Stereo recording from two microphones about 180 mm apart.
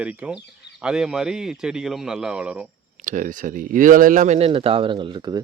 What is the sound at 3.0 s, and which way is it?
Speech, 45° right (ahead or behind).